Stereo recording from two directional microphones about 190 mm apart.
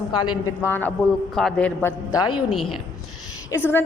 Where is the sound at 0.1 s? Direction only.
20° left (ahead or behind).